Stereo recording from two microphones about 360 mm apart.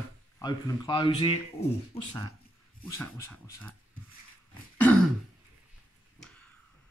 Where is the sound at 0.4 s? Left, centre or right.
Centre.